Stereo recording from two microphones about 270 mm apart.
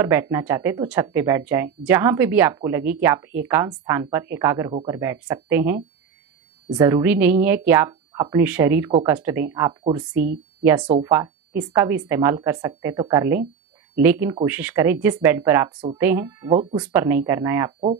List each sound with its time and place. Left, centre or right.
0.0 s speech: centre
6.8 s speech: centre